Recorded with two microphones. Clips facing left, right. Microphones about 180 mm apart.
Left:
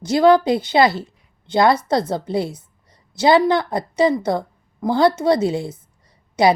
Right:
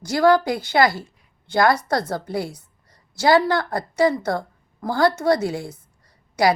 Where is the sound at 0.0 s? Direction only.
20° left (ahead or behind).